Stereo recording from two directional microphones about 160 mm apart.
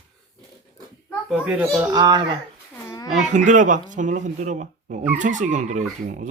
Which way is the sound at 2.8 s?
20° left (ahead or behind).